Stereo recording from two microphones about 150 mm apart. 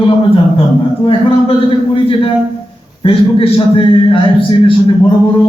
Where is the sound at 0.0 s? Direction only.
40° left (ahead or behind).